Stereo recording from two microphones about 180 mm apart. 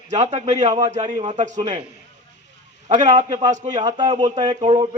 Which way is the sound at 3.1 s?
45° right (ahead or behind).